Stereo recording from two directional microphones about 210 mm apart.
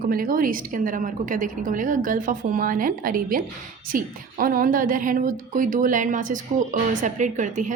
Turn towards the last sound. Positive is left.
turn(degrees=-35)  # may be behind; listen again after turning